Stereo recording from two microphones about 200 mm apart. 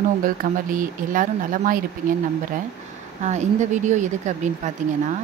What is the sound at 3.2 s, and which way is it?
Speech, 35° right (ahead or behind).